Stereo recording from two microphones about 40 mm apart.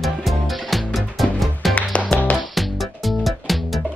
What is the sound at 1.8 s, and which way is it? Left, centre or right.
Music, left.